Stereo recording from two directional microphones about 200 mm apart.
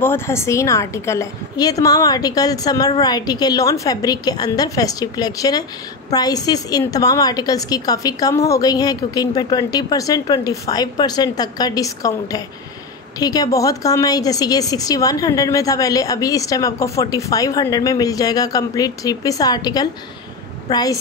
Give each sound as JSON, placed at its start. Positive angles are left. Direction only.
{"t": 0.0, "sound": "a woman's voice", "side_deg": 10}